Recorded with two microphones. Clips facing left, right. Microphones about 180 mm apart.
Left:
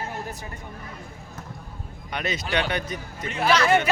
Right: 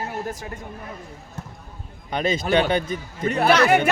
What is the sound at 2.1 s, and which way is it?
A man's voice, 30° right (ahead or behind).